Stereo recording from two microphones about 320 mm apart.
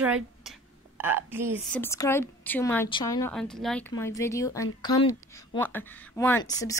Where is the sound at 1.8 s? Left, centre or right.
Centre.